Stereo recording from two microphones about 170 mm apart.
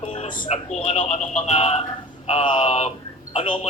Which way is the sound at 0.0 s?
35° left (ahead or behind).